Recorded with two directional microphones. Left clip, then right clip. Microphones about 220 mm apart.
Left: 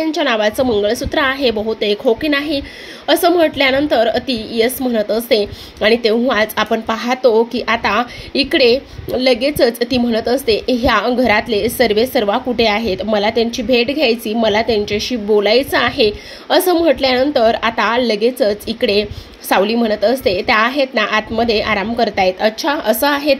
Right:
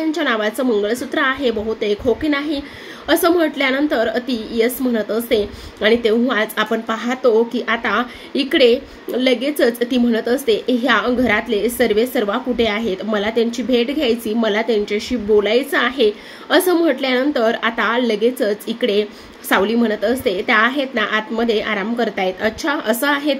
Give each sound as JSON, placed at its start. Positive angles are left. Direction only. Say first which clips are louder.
{"t": 0.1, "sound": "a woman's voice", "louder": "left 4 dB", "side_deg": 15}